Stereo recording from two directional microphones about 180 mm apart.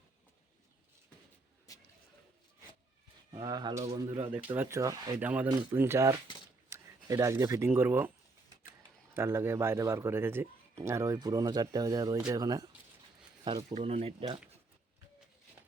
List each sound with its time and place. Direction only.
3.3 s speech: 25° right (ahead or behind)
4.5 s a man's voice: 15° right (ahead or behind)
5.1 s a man's voice: 10° right (ahead or behind)
9.1 s a man's voice: 15° right (ahead or behind)
13.7 s speech: 35° right (ahead or behind)